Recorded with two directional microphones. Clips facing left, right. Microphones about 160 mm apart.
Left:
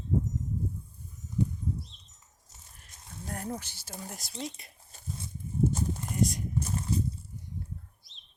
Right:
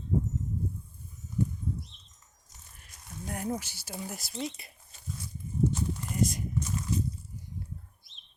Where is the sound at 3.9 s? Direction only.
5° right (ahead or behind).